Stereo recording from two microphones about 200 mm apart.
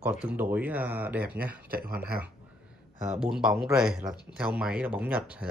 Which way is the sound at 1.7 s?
50° right (ahead or behind).